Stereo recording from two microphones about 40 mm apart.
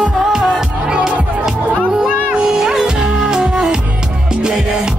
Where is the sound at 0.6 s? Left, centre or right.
Centre.